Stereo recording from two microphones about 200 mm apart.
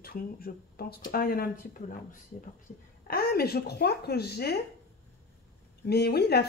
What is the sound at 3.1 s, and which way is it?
Speech, 50° left (ahead or behind).